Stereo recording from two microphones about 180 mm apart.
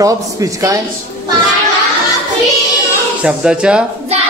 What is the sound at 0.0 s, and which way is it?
Speech, 20° right (ahead or behind).